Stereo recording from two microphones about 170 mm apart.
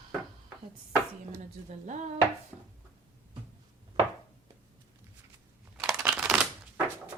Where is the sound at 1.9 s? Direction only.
45° right (ahead or behind).